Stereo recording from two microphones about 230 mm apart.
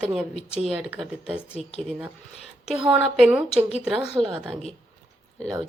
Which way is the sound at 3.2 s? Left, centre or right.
Centre.